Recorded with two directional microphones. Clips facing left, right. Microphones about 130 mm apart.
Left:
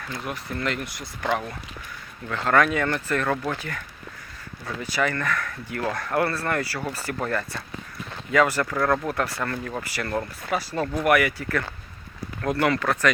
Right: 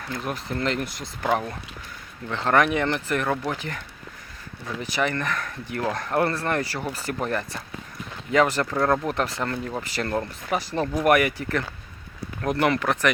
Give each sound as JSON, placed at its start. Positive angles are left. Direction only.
{"t": 0.4, "sound": "speech", "side_deg": -25}